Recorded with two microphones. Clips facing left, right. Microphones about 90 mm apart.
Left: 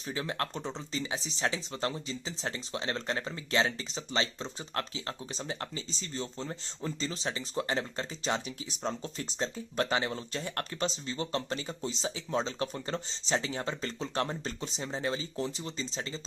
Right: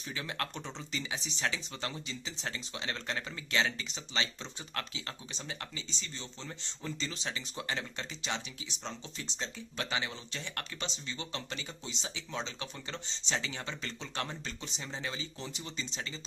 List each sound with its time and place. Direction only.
0.0 s speech: 30° left (ahead or behind)